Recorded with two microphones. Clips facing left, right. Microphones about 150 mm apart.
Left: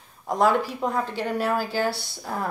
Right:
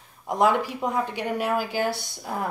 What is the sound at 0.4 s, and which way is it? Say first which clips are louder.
A woman's voice: even; 15° right (ahead or behind).